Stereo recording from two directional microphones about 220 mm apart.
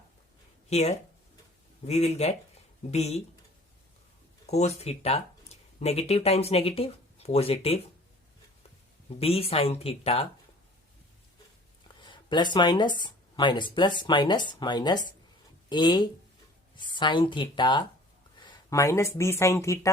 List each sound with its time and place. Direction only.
0.7 s speech: 30° left (ahead or behind)
4.4 s speech: 30° left (ahead or behind)
9.1 s speech: 25° left (ahead or behind)
11.9 s speech: 20° left (ahead or behind)